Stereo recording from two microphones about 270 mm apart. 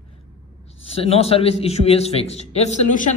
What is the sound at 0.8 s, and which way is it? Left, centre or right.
A man's voice, left.